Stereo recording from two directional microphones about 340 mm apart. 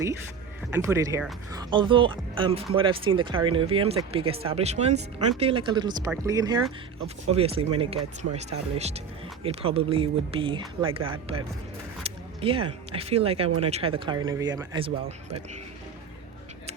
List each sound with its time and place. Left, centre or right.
0.7 s speech: centre
12.0 s music: centre
12.9 s speech: centre